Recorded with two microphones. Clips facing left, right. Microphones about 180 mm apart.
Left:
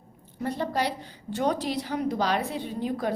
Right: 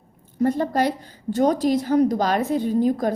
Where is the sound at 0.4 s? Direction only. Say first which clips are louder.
Right 7 dB; 45° right (ahead or behind).